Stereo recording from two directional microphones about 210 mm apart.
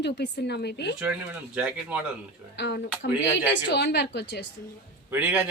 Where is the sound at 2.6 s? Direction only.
55° left (ahead or behind).